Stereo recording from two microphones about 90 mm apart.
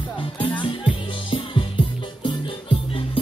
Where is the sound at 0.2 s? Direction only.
65° left (ahead or behind).